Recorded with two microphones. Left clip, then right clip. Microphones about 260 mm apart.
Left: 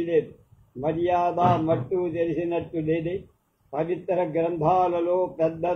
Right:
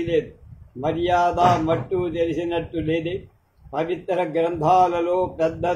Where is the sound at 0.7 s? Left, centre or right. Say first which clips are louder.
Right 3 dB; right.